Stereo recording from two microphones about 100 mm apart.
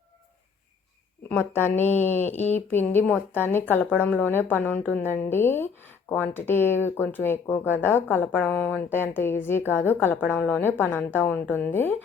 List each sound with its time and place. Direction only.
1.3 s a woman's voice: 20° left (ahead or behind)